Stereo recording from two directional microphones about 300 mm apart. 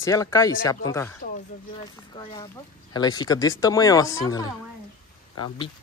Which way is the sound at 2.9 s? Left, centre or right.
Centre.